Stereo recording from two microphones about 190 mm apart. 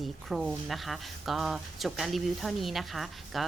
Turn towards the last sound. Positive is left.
turn(degrees=0)  # may be behind; listen again after turning